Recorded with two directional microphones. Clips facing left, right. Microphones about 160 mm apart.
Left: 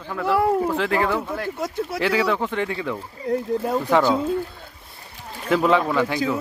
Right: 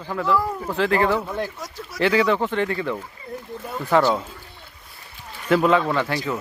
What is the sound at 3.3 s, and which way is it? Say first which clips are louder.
Speech: left 12 dB; 90° left.